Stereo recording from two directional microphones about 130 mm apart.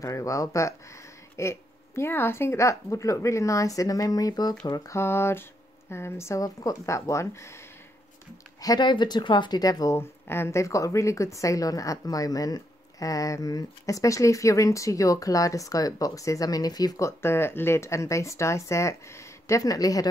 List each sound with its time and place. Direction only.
0.0 s speech: 25° left (ahead or behind)